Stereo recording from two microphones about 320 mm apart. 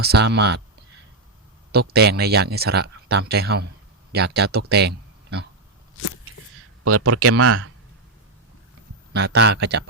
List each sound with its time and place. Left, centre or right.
0.0 s speech: right
1.7 s speech: right
6.8 s speech: right
9.1 s speech: right